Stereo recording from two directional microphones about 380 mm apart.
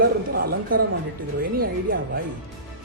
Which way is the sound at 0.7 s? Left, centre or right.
Right.